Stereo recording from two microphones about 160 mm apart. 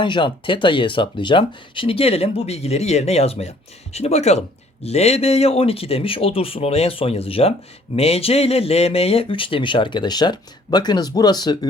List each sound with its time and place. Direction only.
0.0 s speech: 30° left (ahead or behind)